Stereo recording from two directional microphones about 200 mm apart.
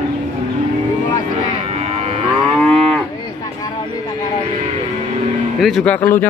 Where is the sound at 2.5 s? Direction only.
Centre (ahead or behind).